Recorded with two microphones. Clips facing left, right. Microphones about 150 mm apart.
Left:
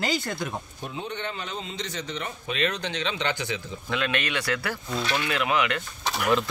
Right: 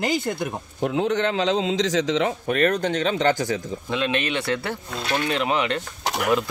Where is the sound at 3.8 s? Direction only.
20° right (ahead or behind).